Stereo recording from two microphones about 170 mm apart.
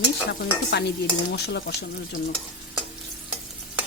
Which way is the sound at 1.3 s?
75° left (ahead or behind).